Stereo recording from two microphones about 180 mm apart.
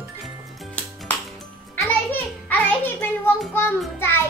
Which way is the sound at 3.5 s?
10° left (ahead or behind).